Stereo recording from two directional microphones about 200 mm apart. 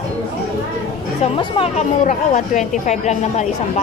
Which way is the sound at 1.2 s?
30° left (ahead or behind).